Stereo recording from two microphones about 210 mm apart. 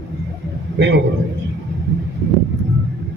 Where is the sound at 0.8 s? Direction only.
55° right (ahead or behind).